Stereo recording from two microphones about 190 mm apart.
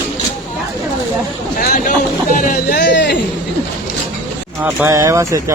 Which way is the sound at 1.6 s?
50° left (ahead or behind).